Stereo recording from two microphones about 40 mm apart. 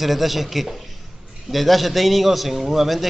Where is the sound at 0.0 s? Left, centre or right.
Centre.